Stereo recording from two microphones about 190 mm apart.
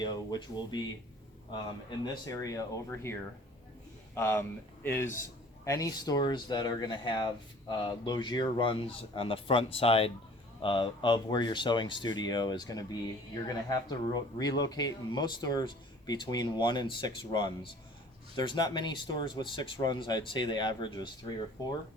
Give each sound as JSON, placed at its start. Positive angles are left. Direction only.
{"t": 0.0, "sound": "speech", "side_deg": 20}
{"t": 2.2, "sound": "speech", "side_deg": 20}